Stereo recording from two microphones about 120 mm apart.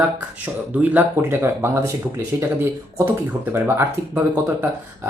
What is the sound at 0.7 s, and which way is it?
Speech, 15° right (ahead or behind).